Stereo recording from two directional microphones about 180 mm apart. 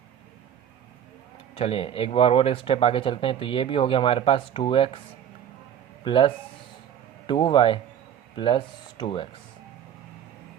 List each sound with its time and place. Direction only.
1.5 s speech: 30° left (ahead or behind)
6.1 s speech: 30° left (ahead or behind)